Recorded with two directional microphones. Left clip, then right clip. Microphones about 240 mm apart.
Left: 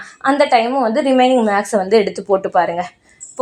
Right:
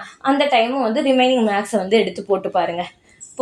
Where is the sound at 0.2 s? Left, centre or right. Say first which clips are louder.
Left 3 dB; left.